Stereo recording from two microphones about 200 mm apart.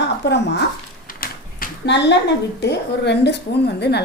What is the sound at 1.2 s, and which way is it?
A woman's voice, 55° left (ahead or behind).